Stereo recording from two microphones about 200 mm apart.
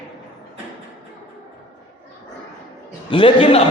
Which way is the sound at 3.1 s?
25° left (ahead or behind).